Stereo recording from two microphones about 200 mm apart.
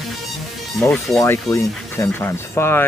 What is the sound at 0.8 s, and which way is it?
Speech, 5° left (ahead or behind).